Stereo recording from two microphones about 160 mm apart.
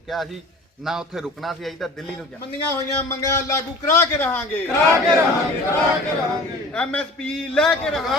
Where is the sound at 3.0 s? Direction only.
20° left (ahead or behind).